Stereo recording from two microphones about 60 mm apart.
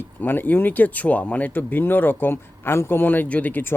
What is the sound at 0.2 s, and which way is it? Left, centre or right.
A man's voice, left.